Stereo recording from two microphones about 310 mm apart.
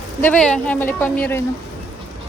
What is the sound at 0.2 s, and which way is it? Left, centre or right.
A woman's voice, centre.